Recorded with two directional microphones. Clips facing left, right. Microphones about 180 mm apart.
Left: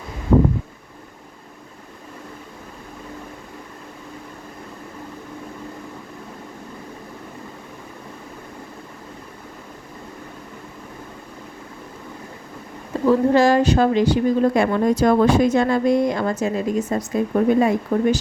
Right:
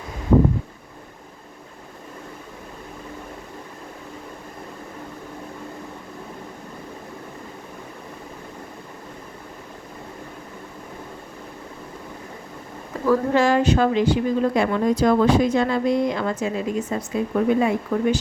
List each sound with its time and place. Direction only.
12.9 s speech: 30° left (ahead or behind)